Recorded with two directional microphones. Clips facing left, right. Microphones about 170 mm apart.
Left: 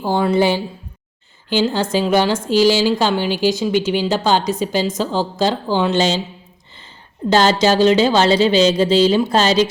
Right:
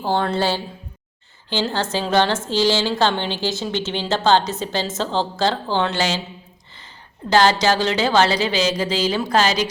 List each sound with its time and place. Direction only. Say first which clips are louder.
0.0 s a woman's voice: left 5 dB; 10° left (ahead or behind)
7.3 s speech: left 2 dB; 20° left (ahead or behind)